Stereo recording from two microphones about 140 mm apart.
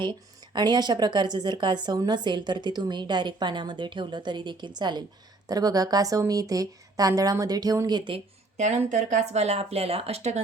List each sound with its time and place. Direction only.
0.5 s a woman's voice: 30° right (ahead or behind)
8.5 s speech: 60° right (ahead or behind)